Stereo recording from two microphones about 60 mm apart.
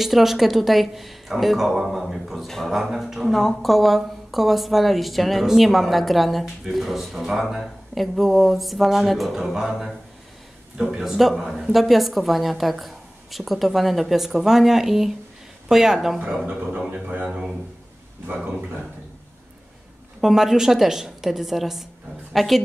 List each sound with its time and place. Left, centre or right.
0.0 s speech: centre
16.9 s speech: right
17.3 s speech: centre
20.2 s a woman's voice: centre